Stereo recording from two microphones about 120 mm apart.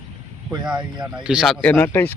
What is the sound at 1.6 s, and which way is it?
Speech, 15° left (ahead or behind).